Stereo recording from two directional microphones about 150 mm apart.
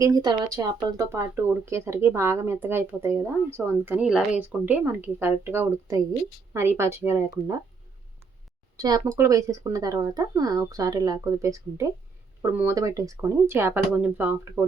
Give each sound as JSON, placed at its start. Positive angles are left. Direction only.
{"t": 0.0, "sound": "speech", "side_deg": -25}
{"t": 8.7, "sound": "speech", "side_deg": -25}